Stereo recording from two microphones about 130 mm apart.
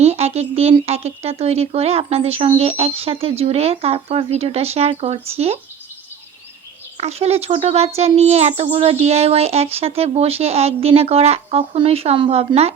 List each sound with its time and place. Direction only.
0.0 s a child's voice: 55° right (ahead or behind)
6.9 s a child's voice: 55° right (ahead or behind)